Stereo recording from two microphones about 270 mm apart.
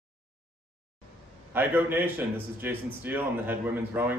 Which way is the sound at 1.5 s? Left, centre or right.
Centre.